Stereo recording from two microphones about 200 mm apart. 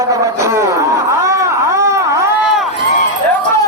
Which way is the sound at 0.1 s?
15° right (ahead or behind).